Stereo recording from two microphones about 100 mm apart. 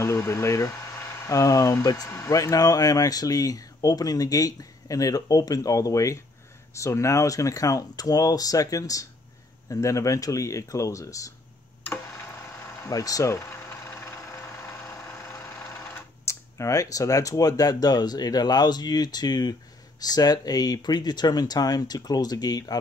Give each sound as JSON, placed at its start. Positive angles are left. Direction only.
{"t": 0.0, "sound": "speech", "side_deg": 30}
{"t": 12.8, "sound": "a sound", "side_deg": 35}
{"t": 15.1, "sound": "speech", "side_deg": 30}